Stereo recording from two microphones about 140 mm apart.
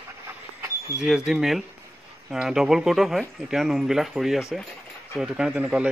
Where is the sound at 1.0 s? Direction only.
5° right (ahead or behind).